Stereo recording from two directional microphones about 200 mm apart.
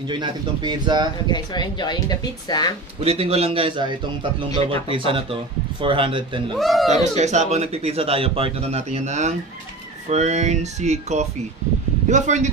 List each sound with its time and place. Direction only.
0.1 s speech: 25° right (ahead or behind)
1.2 s speech: 20° left (ahead or behind)
3.0 s speech: 30° right (ahead or behind)
6.5 s speech: centre (ahead or behind)
7.2 s a man's voice: 35° right (ahead or behind)